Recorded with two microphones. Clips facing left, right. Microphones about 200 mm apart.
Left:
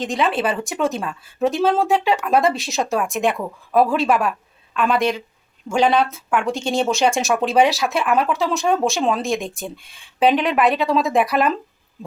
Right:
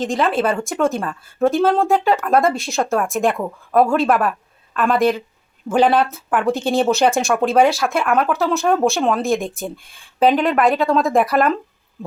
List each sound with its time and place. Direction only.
0.1 s speech: centre (ahead or behind)
5.7 s speech: 15° right (ahead or behind)
6.0 s speech: 55° right (ahead or behind)
7.2 s speech: centre (ahead or behind)